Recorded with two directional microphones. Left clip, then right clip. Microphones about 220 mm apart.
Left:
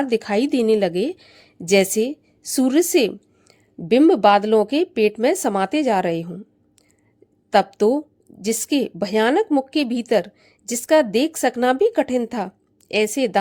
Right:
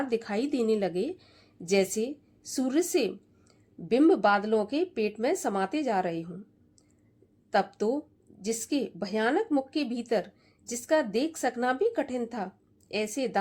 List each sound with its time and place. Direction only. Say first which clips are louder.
0.0 s a woman's voice: left 10 dB; 35° left (ahead or behind)
7.5 s a woman's voice: left 10 dB; 35° left (ahead or behind)